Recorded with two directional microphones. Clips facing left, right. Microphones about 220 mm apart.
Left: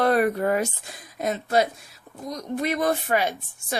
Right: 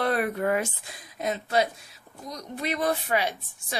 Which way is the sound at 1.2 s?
50° left (ahead or behind).